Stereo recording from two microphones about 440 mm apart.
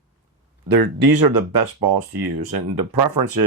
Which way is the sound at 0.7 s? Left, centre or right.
Right.